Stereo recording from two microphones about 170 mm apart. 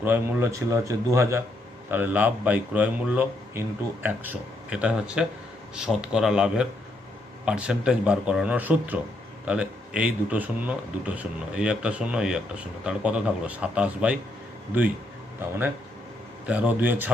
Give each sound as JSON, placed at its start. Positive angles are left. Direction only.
{"t": 0.0, "sound": "a man's voice", "side_deg": -15}
{"t": 16.5, "sound": "a man's voice", "side_deg": -10}